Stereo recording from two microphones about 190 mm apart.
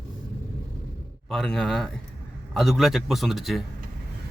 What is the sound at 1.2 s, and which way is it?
A man's voice, centre (ahead or behind).